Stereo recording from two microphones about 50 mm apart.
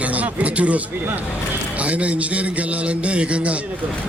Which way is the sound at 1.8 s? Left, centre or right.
Right.